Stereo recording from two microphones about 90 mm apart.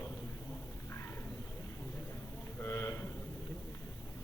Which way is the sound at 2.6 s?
30° left (ahead or behind).